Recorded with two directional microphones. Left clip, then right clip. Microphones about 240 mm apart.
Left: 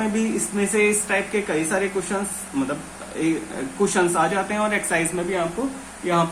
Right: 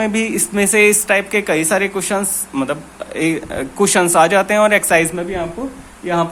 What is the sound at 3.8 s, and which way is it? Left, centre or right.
Speech, right.